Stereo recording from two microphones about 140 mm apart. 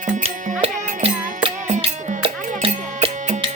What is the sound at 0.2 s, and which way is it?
Music, 45° right (ahead or behind).